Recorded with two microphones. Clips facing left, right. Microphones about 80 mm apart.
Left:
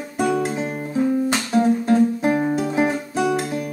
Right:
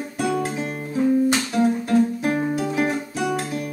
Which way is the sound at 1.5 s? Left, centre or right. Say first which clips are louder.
Left 3 dB; left.